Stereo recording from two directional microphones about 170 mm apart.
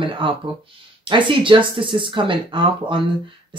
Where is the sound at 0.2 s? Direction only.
30° right (ahead or behind).